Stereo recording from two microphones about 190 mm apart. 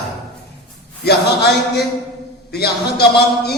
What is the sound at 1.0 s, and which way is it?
Speech, 60° left (ahead or behind).